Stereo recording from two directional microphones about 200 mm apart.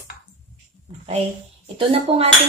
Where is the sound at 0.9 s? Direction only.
30° right (ahead or behind).